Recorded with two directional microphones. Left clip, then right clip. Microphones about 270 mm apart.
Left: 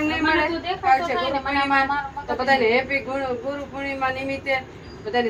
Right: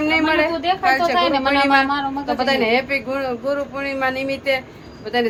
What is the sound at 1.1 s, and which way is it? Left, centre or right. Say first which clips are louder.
Speech: right 6 dB; right.